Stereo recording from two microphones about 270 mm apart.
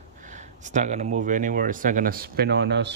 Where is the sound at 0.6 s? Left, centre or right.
Right.